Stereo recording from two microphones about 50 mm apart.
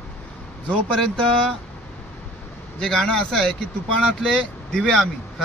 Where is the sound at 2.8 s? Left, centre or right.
Centre.